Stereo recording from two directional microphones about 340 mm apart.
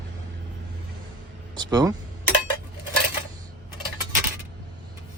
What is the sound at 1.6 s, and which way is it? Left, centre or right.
Speech, centre.